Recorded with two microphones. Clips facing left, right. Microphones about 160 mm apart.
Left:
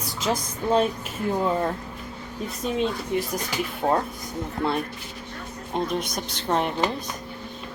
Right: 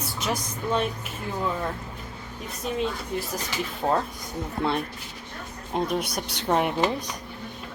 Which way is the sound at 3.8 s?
5° left (ahead or behind).